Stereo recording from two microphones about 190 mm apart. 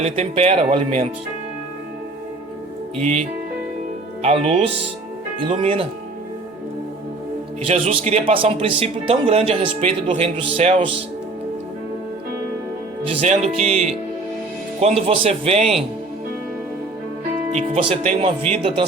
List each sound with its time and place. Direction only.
0.0 s a man's voice: 35° right (ahead or behind)
3.0 s a man's voice: 35° right (ahead or behind)
7.7 s a man's voice: 35° right (ahead or behind)
13.1 s a man's voice: 35° right (ahead or behind)
17.5 s a man's voice: 30° right (ahead or behind)